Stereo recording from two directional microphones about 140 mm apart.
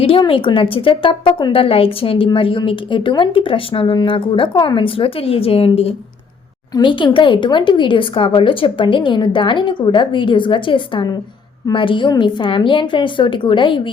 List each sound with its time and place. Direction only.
0.0 s a woman's voice: 40° left (ahead or behind)
6.7 s a woman's voice: 35° left (ahead or behind)